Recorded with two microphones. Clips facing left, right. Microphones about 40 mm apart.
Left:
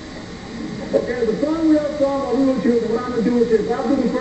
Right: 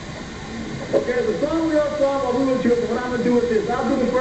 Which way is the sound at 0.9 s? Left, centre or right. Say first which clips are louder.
Left 1 dB; right.